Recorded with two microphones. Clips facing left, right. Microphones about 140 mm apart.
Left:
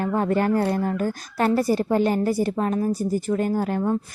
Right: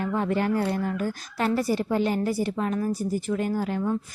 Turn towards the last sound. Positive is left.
turn(degrees=45)  # may be behind; listen again after turning